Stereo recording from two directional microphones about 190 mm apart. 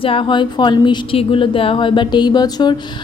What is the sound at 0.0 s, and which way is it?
Speech, 25° left (ahead or behind).